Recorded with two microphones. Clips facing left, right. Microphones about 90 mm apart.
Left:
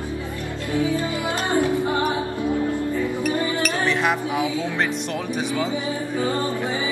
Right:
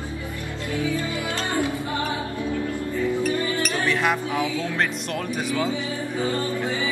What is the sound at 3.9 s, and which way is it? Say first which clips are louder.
Chink: even; centre (ahead or behind).